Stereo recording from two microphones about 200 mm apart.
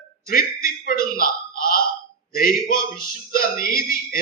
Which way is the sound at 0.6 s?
45° left (ahead or behind).